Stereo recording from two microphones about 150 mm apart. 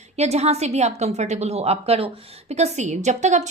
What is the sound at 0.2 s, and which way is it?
A woman's voice, 45° right (ahead or behind).